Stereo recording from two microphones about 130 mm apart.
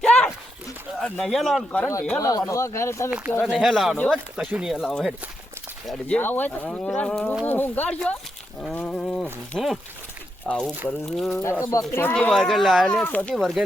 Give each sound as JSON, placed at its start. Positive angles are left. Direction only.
{"t": 0.0, "sound": "a sound", "side_deg": 10}
{"t": 0.9, "sound": "speech", "side_deg": 5}
{"t": 2.1, "sound": "speech", "side_deg": 25}
{"t": 3.1, "sound": "speech", "side_deg": -10}
{"t": 6.1, "sound": "speech", "side_deg": 15}
{"t": 11.3, "sound": "speech", "side_deg": 15}
{"t": 12.3, "sound": "speech", "side_deg": 0}
{"t": 13.3, "sound": "speech", "side_deg": 0}